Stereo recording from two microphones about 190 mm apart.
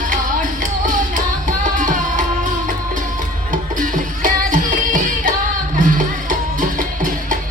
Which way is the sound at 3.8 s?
45° right (ahead or behind).